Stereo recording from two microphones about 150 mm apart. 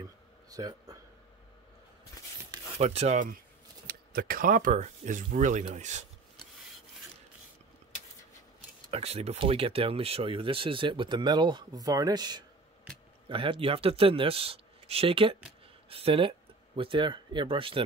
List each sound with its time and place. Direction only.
0.0 s a sound: 25° right (ahead or behind)
2.8 s speech: 45° right (ahead or behind)
3.8 s speech: 85° right; by 6.0 s 55° right (ahead or behind)
8.9 s speech: 40° right (ahead or behind)